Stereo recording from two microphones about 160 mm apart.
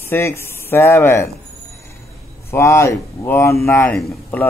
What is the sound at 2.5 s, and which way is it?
A man's voice, 20° left (ahead or behind).